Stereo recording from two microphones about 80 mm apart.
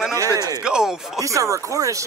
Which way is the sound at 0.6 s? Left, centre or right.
Centre.